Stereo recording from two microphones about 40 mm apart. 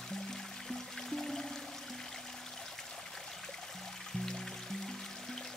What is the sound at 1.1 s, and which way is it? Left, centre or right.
Music, centre.